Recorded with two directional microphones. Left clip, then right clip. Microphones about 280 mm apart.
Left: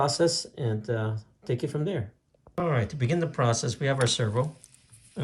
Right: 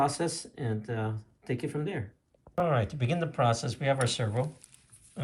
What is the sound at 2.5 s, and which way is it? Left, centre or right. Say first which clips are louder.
Speech: even; centre.